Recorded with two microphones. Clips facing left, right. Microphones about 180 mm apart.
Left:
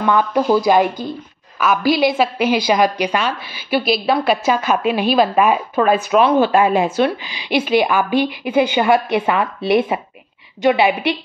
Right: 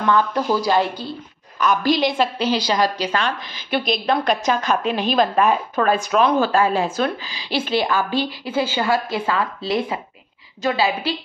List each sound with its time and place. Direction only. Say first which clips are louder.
0.0 s a woman's voice: left 3 dB; 15° left (ahead or behind)